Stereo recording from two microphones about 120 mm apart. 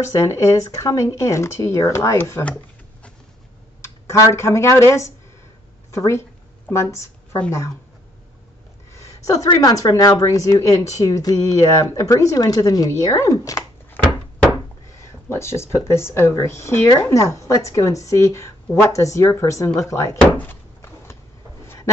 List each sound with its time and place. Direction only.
0.2 s speech: 25° left (ahead or behind)
3.8 s speech: 25° left (ahead or behind)
8.9 s a sound: 25° left (ahead or behind)
9.6 s speech: 30° left (ahead or behind)
15.2 s speech: 20° left (ahead or behind)
20.2 s door: 15° left (ahead or behind)